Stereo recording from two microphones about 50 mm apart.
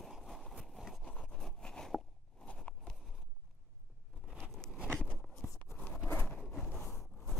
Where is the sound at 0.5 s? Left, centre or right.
Centre.